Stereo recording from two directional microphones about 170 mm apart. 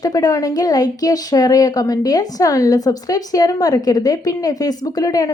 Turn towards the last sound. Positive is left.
turn(degrees=20)  # may be behind; listen again after turning